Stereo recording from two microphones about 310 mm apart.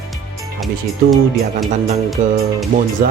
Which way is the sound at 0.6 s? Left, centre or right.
Centre.